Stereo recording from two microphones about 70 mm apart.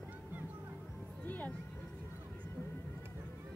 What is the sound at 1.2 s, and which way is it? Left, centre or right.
Music, left.